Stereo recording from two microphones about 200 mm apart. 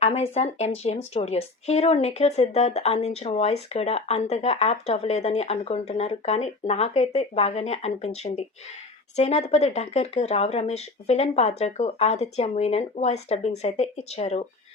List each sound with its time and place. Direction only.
0.0 s speech: 30° left (ahead or behind)